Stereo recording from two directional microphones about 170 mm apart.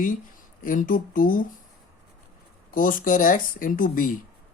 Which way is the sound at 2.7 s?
55° left (ahead or behind).